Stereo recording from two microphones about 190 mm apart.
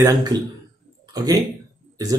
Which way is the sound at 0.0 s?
20° right (ahead or behind).